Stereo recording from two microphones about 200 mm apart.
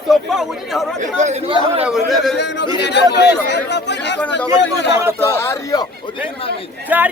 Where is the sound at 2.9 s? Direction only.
55° left (ahead or behind).